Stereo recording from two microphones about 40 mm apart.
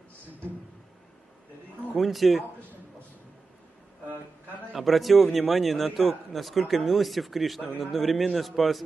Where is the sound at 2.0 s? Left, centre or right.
Centre.